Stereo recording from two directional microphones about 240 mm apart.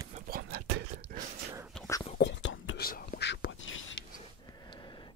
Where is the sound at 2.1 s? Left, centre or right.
Left.